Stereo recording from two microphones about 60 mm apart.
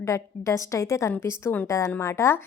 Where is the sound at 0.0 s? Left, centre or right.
Left.